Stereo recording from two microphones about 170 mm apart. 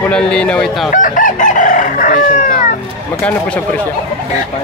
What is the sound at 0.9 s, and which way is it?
Chicken, 50° left (ahead or behind).